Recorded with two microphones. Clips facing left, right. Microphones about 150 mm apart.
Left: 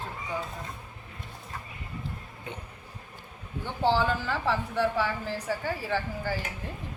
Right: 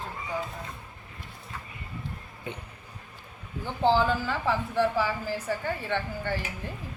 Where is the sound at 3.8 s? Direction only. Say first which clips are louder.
Right 2 dB; centre (ahead or behind).